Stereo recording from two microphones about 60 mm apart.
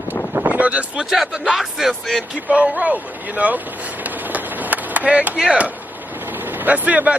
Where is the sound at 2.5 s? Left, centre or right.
Right.